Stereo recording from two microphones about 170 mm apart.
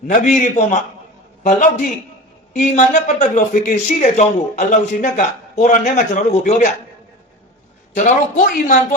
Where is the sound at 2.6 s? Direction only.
45° left (ahead or behind).